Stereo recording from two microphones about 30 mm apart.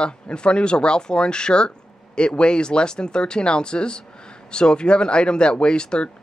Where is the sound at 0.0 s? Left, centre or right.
Left.